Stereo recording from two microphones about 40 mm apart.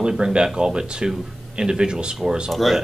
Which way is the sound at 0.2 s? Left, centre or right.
Right.